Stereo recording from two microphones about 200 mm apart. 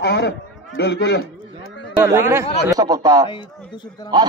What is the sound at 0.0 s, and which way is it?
A man's voice, 55° left (ahead or behind).